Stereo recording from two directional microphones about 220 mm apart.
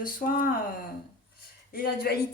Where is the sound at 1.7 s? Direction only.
45° left (ahead or behind).